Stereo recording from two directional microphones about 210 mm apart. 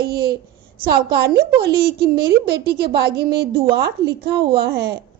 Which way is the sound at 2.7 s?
50° right (ahead or behind).